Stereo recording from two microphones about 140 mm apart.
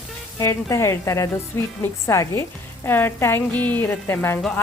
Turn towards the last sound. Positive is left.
turn(degrees=20)  # may be behind; listen again after turning